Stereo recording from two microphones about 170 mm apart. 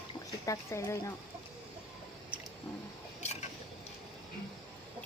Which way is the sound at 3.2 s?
40° left (ahead or behind).